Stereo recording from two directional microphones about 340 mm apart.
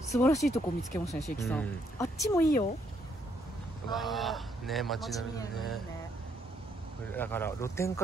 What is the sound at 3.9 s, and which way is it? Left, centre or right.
Speech, centre.